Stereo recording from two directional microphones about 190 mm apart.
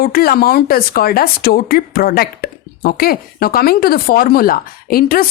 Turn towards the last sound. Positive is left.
turn(degrees=50)  # may be behind; listen again after turning